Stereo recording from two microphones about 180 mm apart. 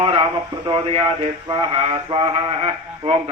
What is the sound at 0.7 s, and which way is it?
A man's voice, 30° right (ahead or behind).